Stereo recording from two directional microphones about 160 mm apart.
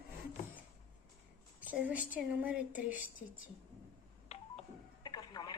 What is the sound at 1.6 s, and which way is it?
Speech, 10° right (ahead or behind).